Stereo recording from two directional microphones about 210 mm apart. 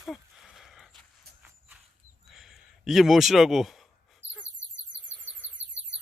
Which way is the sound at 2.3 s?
Centre (ahead or behind).